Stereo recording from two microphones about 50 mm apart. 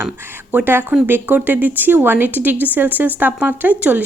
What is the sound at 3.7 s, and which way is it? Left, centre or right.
Speech, right.